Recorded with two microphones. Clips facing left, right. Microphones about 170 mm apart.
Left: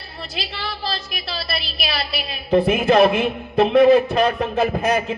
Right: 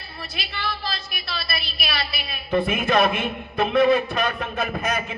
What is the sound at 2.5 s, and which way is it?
A man's voice, 35° left (ahead or behind).